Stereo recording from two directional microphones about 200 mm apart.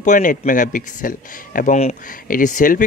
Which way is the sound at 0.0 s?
40° left (ahead or behind).